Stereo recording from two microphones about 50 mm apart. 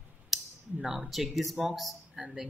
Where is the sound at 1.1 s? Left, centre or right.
Centre.